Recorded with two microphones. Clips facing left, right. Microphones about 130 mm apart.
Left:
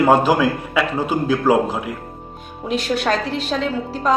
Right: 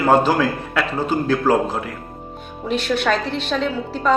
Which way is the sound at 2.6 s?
40° left (ahead or behind).